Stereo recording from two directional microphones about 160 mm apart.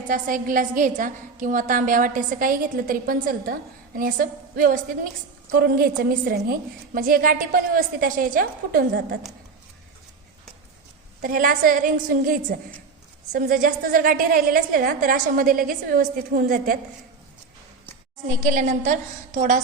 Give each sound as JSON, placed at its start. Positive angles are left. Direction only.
{"t": 0.1, "sound": "a woman's voice", "side_deg": -60}
{"t": 5.5, "sound": "a woman's voice", "side_deg": -70}
{"t": 11.2, "sound": "a woman's voice", "side_deg": -60}
{"t": 18.4, "sound": "a woman's voice", "side_deg": -50}